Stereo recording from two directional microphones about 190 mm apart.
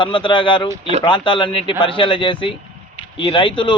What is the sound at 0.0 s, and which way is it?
Speech, 25° left (ahead or behind).